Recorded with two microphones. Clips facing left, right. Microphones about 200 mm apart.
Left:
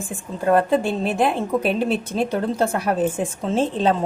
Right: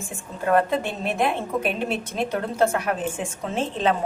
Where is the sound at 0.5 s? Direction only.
30° left (ahead or behind).